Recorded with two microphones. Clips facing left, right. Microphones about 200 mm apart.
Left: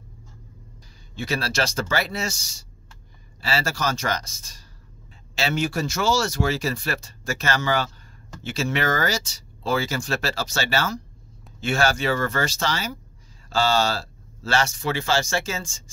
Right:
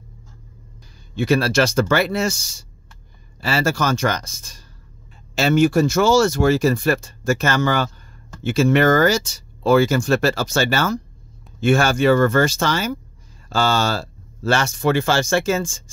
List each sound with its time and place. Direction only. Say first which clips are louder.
1.1 s speech: right 9 dB; 55° right (ahead or behind)